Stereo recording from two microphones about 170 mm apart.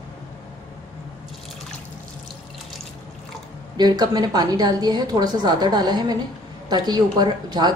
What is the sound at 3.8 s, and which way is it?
A woman's voice, 25° right (ahead or behind).